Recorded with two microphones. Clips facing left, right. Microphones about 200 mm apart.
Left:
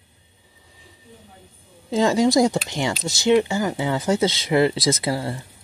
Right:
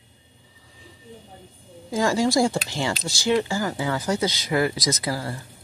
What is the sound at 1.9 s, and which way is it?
Speech, 20° left (ahead or behind).